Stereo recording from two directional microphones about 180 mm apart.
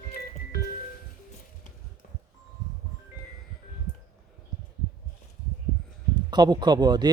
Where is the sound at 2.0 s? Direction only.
45° left (ahead or behind).